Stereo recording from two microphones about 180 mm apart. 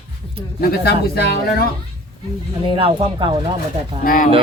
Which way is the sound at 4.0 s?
50° left (ahead or behind).